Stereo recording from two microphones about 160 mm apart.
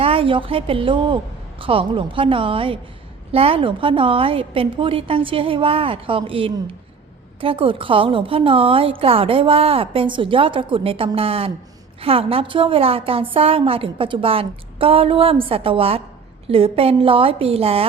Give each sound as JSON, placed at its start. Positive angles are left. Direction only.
{"t": 0.0, "sound": "a woman's voice", "side_deg": -35}